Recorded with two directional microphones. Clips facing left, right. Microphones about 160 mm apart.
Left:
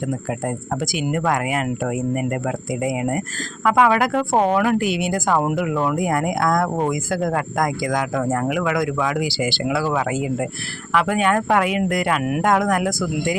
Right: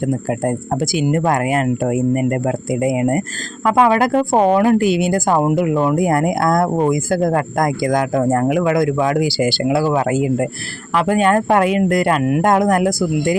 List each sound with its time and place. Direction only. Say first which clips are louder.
0.9 s speech: right 5 dB; 35° right (ahead or behind)
3.7 s speech: right 3 dB; 30° right (ahead or behind)
5.4 s speech: right 5 dB; 25° right (ahead or behind)
6.0 s speech: right 4 dB; 40° right (ahead or behind)
10.9 s speech: right 4 dB; 35° right (ahead or behind)